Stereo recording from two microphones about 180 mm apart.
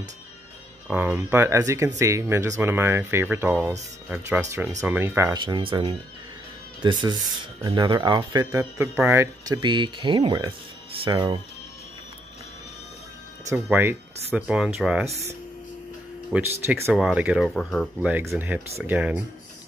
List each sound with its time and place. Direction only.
0.8 s speech: 10° right (ahead or behind)
5.4 s speech: 25° right (ahead or behind)
9.6 s speech: 25° right (ahead or behind)
13.5 s speech: 10° right (ahead or behind)
16.3 s speech: 10° right (ahead or behind)
18.0 s speech: 10° right (ahead or behind)